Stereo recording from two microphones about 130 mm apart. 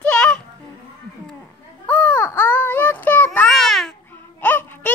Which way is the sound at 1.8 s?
10° left (ahead or behind).